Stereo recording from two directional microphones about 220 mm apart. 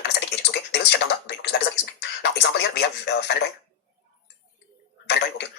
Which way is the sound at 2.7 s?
50° left (ahead or behind).